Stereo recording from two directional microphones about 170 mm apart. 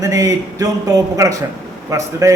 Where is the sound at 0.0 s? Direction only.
20° right (ahead or behind).